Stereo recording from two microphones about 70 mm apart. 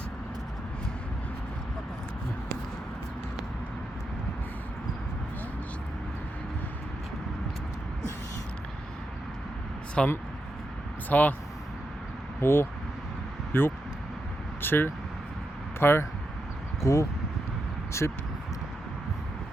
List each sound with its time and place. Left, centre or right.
10.0 s speech: centre
11.1 s speech: left
12.4 s speech: left
16.8 s speech: left